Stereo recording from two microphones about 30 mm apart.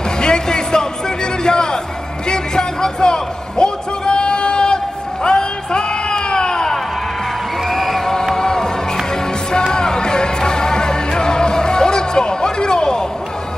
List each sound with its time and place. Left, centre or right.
0.2 s music: left
2.2 s a sound: left
7.6 s music: centre
8.4 s music: left